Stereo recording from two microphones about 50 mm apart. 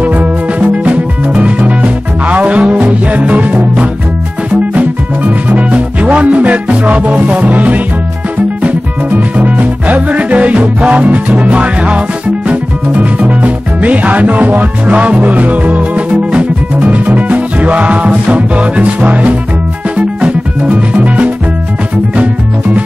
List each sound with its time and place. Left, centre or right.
0.0 s music: right